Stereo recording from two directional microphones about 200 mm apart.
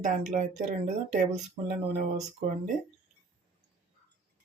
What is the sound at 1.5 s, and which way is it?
Speech, 35° right (ahead or behind).